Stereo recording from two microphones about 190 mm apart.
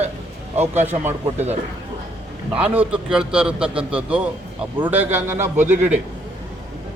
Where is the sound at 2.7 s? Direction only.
5° right (ahead or behind).